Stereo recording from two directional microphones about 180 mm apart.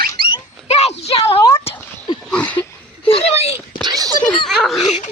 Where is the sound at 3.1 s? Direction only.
35° left (ahead or behind).